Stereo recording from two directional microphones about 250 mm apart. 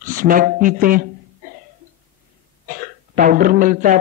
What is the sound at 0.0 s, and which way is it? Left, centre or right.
Speech, right.